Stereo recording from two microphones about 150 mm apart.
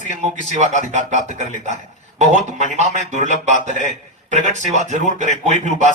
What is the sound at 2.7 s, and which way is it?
A man's voice, 50° right (ahead or behind).